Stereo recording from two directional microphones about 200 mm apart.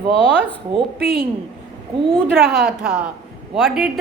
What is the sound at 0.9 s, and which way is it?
Speech, 50° right (ahead or behind).